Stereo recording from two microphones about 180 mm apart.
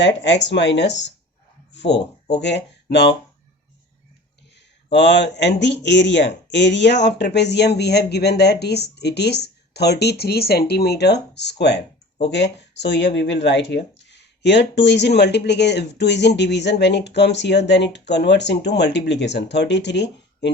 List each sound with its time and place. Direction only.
0.0 s speech: 75° left (ahead or behind)
4.9 s speech: 75° left (ahead or behind)